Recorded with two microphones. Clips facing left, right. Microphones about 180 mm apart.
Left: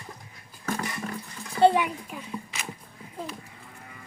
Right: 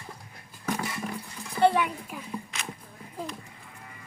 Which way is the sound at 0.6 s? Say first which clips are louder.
Even; 10° right (ahead or behind).